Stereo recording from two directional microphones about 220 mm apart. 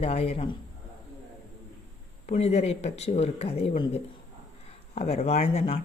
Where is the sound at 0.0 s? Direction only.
25° left (ahead or behind).